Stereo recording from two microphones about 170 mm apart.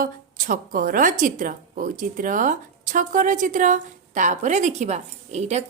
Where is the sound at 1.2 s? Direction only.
50° right (ahead or behind).